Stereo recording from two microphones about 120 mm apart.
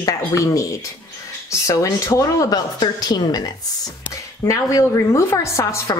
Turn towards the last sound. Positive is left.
turn(degrees=25)  # may be behind; listen again after turning